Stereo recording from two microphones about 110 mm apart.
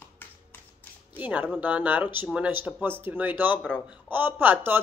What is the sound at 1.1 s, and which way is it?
Speech, 15° right (ahead or behind).